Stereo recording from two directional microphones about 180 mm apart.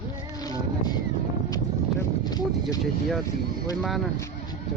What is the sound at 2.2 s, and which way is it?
Music, 20° left (ahead or behind).